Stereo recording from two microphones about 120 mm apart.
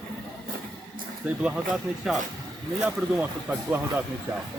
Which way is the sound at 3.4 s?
15° right (ahead or behind).